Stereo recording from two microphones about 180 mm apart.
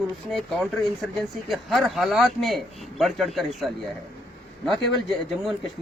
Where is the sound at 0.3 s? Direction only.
Centre (ahead or behind).